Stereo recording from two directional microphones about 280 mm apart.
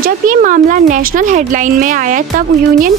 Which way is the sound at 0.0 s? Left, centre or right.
Right.